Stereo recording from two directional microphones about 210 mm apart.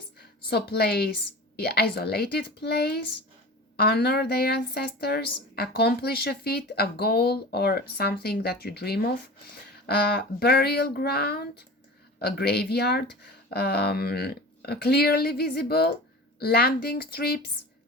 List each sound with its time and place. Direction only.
0.2 s a woman's voice: 50° left (ahead or behind)